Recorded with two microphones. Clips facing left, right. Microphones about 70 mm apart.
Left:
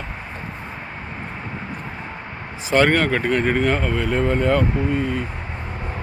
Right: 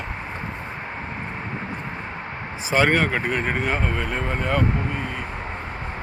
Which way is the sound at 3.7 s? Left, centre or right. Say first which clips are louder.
Left 3 dB; centre.